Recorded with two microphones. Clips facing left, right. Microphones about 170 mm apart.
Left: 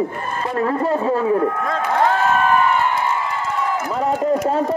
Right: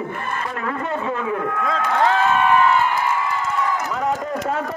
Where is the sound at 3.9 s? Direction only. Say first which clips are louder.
Left 5 dB; 30° left (ahead or behind).